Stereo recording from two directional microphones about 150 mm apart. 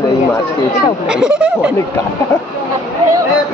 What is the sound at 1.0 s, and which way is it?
Speech, 5° right (ahead or behind).